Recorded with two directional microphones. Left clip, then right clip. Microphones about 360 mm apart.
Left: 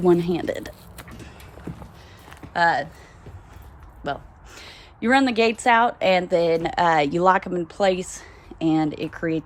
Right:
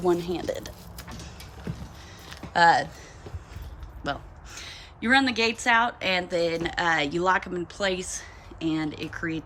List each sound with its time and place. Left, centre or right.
0.1 s speech: centre
2.3 s a sound: centre
4.0 s a woman's voice: centre